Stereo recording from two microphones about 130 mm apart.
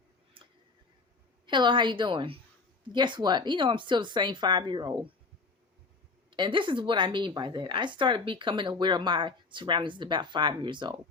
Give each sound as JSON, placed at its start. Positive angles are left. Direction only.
{"t": 0.4, "sound": "tick", "side_deg": -40}
{"t": 1.5, "sound": "a woman's voice", "side_deg": -35}
{"t": 6.3, "sound": "a woman's voice", "side_deg": -40}